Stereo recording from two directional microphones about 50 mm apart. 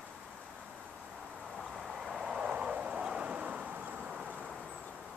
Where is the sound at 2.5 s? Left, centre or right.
Right.